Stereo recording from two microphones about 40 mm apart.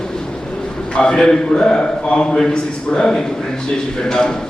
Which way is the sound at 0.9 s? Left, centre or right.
Left.